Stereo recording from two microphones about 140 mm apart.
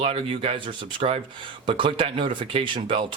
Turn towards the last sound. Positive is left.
turn(degrees=-35)  # may be behind; listen again after turning